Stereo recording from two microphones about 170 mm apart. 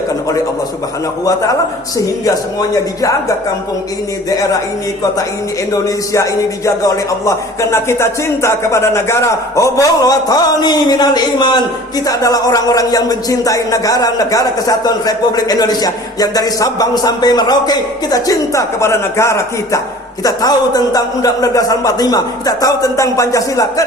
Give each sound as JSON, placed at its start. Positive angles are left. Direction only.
{"t": 1.2, "sound": "speech", "side_deg": 20}
{"t": 5.7, "sound": "speech", "side_deg": 20}